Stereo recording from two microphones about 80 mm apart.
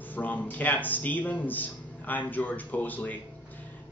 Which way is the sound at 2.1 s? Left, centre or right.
Left.